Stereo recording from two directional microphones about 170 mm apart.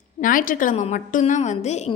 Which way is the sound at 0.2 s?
50° left (ahead or behind).